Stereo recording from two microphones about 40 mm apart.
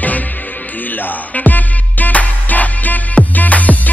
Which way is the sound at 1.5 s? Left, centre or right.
Left.